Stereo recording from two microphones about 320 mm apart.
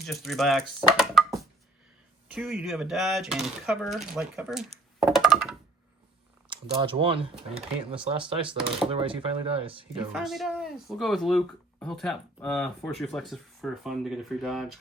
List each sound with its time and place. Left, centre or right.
0.0 s speech: centre
6.5 s speech: centre
10.1 s speech: centre